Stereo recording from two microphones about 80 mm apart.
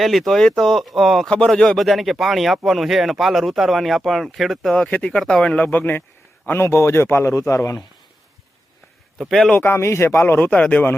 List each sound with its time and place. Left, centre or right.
0.0 s speech: centre; by 6.0 s left
6.6 s a man's voice: left
9.3 s speech: centre
9.6 s speech: left